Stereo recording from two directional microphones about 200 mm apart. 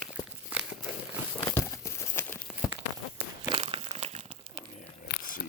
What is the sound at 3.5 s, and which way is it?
Crumpling, 25° right (ahead or behind).